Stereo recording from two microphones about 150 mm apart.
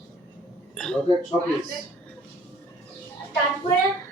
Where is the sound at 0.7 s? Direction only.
5° left (ahead or behind).